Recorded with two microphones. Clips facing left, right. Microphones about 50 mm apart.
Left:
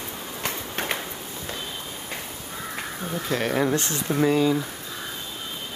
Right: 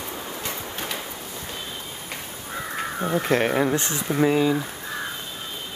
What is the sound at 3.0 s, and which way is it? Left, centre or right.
Speech, right.